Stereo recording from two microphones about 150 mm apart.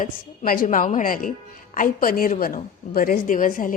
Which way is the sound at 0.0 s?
70° left (ahead or behind).